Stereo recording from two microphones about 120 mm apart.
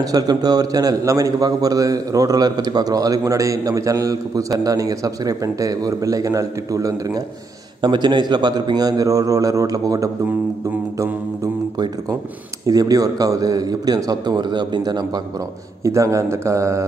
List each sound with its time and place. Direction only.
0.0 s a man's voice: 30° right (ahead or behind)
7.8 s a man's voice: 40° right (ahead or behind)
12.6 s a man's voice: 30° right (ahead or behind)